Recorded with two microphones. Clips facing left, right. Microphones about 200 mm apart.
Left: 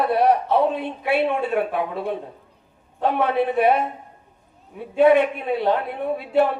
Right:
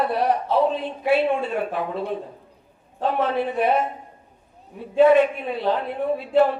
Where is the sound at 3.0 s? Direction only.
60° left (ahead or behind).